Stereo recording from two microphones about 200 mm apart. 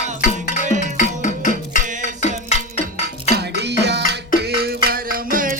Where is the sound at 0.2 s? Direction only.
40° left (ahead or behind).